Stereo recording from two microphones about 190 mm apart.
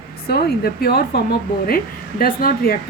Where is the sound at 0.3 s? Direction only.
55° left (ahead or behind).